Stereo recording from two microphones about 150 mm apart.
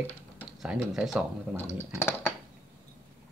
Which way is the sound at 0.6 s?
5° right (ahead or behind).